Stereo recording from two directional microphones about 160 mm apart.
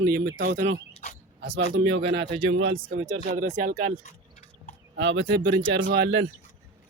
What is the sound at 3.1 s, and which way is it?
Speech, 50° right (ahead or behind).